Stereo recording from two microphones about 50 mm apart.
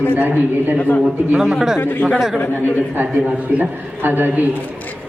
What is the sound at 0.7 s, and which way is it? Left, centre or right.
Speech, left.